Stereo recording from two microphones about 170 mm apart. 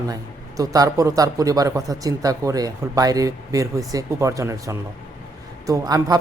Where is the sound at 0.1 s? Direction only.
20° right (ahead or behind).